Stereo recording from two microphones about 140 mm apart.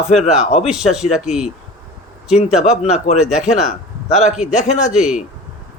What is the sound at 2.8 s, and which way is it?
Speech, 50° left (ahead or behind).